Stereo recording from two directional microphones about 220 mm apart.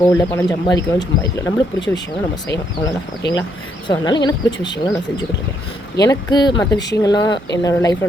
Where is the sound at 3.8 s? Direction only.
20° left (ahead or behind).